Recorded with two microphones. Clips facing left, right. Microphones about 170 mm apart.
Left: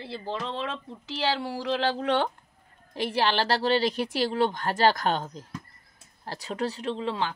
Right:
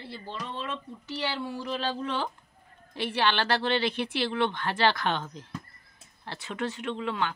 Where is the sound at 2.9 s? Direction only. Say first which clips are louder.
Left 2 dB; 40° left (ahead or behind).